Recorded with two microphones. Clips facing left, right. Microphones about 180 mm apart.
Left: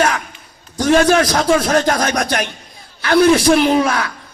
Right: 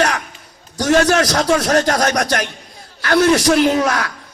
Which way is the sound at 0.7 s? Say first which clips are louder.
Left 2 dB; 40° right (ahead or behind).